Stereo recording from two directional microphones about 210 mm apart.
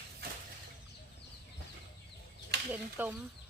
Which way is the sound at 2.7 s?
10° right (ahead or behind).